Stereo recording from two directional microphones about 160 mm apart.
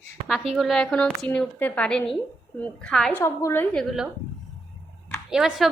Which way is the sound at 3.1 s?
15° left (ahead or behind).